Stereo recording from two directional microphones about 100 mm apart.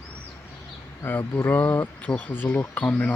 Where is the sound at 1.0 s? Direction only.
20° left (ahead or behind).